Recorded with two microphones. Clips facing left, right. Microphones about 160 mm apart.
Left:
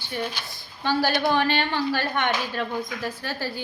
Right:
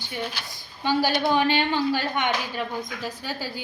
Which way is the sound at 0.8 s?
15° right (ahead or behind).